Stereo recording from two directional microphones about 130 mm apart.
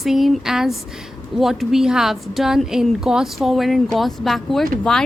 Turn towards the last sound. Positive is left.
turn(degrees=5)  # may be behind; listen again after turning